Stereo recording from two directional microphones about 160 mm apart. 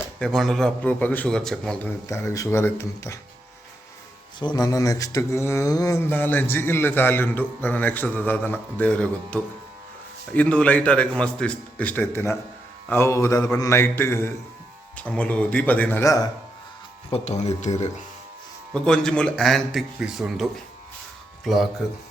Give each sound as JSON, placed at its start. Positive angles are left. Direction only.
{"t": 0.2, "sound": "a man's voice", "side_deg": 5}
{"t": 2.0, "sound": "speech", "side_deg": 20}
{"t": 4.4, "sound": "speech", "side_deg": 25}
{"t": 17.1, "sound": "speech", "side_deg": 45}
{"t": 18.7, "sound": "a man's voice", "side_deg": 5}